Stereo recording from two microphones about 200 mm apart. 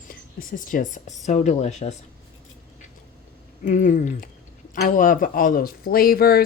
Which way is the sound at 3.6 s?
40° left (ahead or behind).